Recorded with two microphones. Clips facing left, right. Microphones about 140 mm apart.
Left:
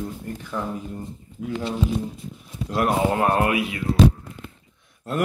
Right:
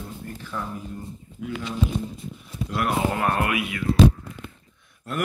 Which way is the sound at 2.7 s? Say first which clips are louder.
Left 3 dB; 30° left (ahead or behind).